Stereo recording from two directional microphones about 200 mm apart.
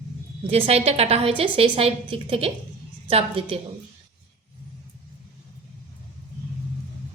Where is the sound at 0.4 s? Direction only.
30° right (ahead or behind).